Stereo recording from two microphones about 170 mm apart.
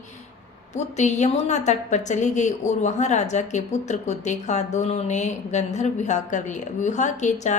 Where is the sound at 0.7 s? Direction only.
45° left (ahead or behind).